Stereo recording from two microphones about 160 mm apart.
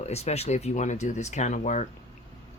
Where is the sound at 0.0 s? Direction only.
40° left (ahead or behind).